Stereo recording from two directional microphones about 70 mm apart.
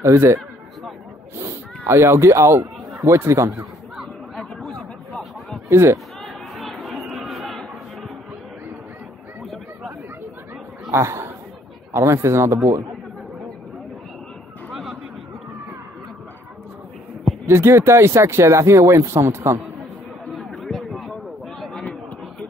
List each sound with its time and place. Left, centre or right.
0.0 s speech: right
1.4 s speech: right
3.9 s chatter: centre
4.6 s a sound: centre
5.7 s speech: right
6.5 s chatter: centre
10.9 s a man's voice: right
14.7 s a sound: centre
17.5 s speech: right
20.3 s a sound: centre